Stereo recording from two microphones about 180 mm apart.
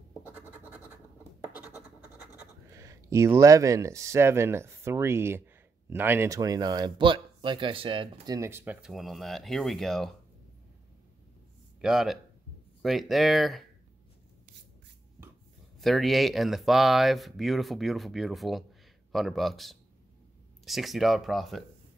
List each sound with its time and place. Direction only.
0.2 s scratch: 10° right (ahead or behind)
2.3 s speech: 15° right (ahead or behind)
8.4 s speech: 15° right (ahead or behind); by 10.1 s centre (ahead or behind)
11.8 s speech: centre (ahead or behind)
15.8 s speech: centre (ahead or behind)